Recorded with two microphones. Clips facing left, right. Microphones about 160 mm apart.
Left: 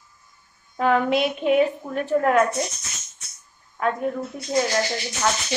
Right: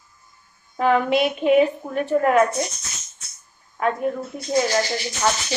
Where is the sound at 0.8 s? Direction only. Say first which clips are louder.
Right 1 dB; centre (ahead or behind).